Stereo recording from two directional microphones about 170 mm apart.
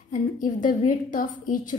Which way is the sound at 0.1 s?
50° left (ahead or behind).